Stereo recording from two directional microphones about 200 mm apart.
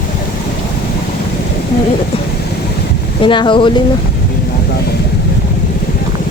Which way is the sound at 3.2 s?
25° left (ahead or behind).